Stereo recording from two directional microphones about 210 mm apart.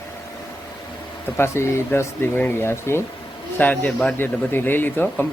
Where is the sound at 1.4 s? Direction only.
10° left (ahead or behind).